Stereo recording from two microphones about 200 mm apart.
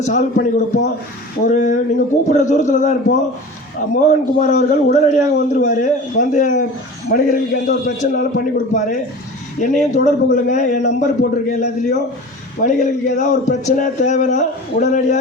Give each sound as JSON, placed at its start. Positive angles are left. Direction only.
{"t": 0.0, "sound": "speech", "side_deg": 35}
{"t": 7.1, "sound": "a man's voice", "side_deg": 50}